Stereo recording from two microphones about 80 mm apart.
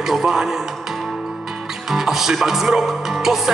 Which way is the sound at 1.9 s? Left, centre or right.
Centre.